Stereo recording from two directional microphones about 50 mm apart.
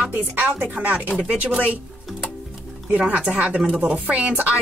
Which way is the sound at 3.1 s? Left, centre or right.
Right.